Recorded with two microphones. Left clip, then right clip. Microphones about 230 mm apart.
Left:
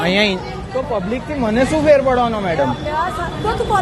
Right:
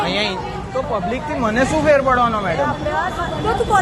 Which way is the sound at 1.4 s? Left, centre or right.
Left.